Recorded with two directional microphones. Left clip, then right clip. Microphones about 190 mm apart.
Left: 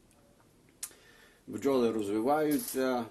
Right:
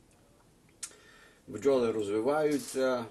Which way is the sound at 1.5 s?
30° left (ahead or behind).